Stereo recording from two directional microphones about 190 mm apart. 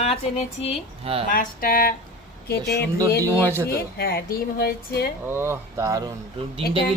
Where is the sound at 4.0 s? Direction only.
55° left (ahead or behind).